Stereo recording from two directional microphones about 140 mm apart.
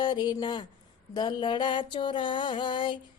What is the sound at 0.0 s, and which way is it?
Mantra, 30° left (ahead or behind).